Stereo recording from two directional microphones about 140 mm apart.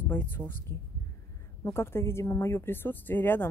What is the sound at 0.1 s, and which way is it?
Speech, 15° left (ahead or behind).